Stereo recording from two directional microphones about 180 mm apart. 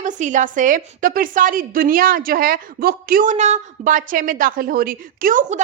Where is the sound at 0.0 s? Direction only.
45° right (ahead or behind).